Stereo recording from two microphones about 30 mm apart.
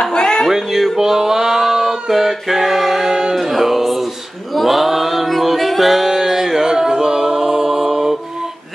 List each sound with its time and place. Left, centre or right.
0.0 s music: left
0.5 s music: centre
0.9 s a sound: centre
3.3 s music: centre
4.6 s mantra: centre
6.1 s music: centre